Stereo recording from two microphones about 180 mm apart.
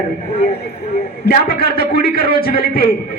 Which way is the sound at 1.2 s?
60° left (ahead or behind).